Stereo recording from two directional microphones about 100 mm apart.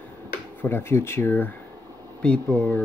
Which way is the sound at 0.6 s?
25° left (ahead or behind).